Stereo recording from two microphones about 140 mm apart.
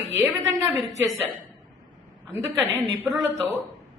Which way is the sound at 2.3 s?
15° right (ahead or behind).